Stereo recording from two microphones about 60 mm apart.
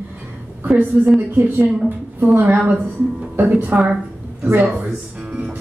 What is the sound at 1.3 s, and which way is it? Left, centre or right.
Speech, right.